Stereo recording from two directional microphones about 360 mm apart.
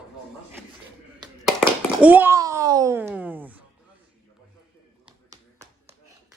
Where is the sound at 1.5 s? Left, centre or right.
Centre.